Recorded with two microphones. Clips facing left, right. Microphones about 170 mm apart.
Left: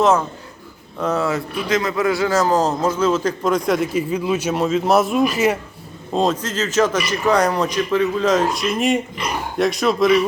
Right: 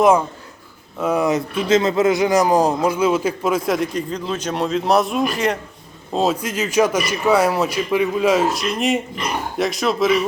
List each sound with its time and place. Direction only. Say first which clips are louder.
0.9 s a man's voice: right 2 dB; 10° right (ahead or behind); by 5.5 s 5° left (ahead or behind)
6.1 s a man's voice: even; 10° right (ahead or behind)